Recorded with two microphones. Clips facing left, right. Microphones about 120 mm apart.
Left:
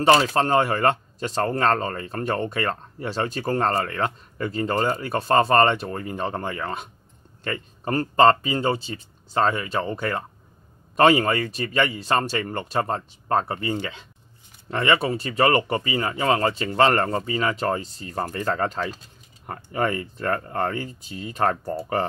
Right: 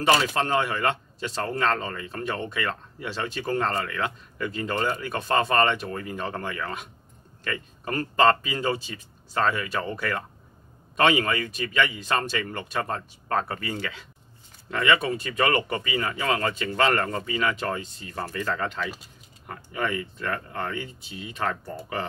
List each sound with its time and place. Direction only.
0.0 s speech: 35° left (ahead or behind)